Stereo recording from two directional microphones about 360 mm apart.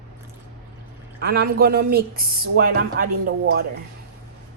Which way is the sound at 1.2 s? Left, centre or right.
Right.